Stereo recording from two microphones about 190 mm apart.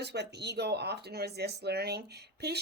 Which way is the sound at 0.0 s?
60° right (ahead or behind).